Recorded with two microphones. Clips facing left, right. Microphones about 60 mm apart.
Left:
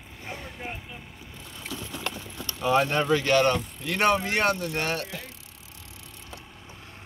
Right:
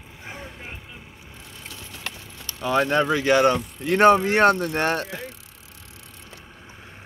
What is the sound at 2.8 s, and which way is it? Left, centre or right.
Speech, centre.